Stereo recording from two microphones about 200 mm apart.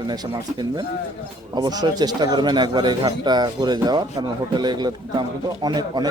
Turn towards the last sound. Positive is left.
turn(degrees=-20)  # may be behind; listen again after turning